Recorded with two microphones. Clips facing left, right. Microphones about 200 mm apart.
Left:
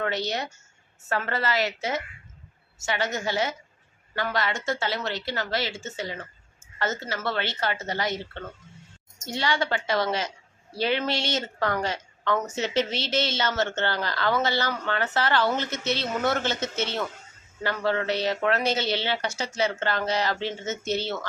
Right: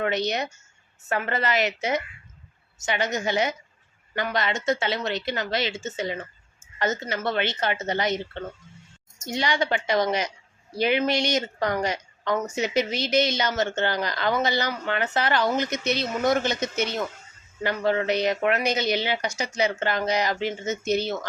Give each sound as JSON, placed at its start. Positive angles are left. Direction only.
{"t": 0.0, "sound": "a woman's voice", "side_deg": -20}